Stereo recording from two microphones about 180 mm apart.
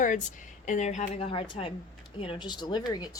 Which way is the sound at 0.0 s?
45° left (ahead or behind).